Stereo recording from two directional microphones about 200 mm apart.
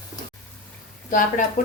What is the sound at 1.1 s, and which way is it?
Speech, 40° left (ahead or behind).